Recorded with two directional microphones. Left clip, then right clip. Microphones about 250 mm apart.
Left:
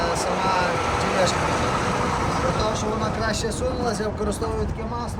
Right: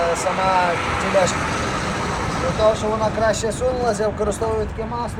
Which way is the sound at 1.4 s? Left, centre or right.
Left.